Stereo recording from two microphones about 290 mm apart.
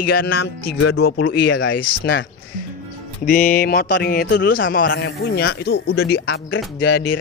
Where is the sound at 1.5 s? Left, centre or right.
Left.